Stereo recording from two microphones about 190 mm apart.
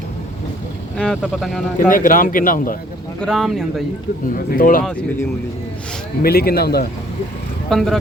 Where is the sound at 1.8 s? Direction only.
45° left (ahead or behind).